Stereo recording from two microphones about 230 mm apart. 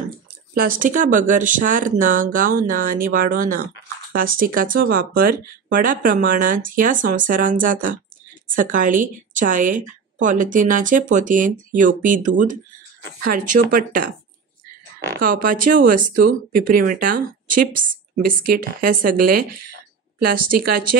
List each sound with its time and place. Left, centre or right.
0.6 s speech: right
15.2 s speech: right